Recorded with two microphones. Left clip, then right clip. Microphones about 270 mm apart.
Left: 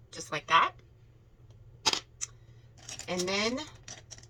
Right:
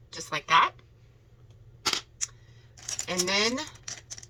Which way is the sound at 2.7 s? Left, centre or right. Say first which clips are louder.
Right 8 dB; right.